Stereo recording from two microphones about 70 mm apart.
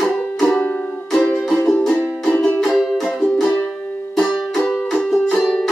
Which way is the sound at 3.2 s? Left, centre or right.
Centre.